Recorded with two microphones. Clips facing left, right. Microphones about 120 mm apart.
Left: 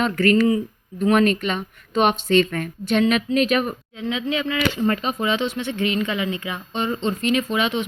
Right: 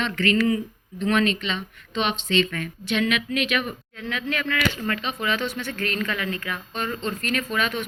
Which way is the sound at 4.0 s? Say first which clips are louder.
Left 5 dB; 20° left (ahead or behind).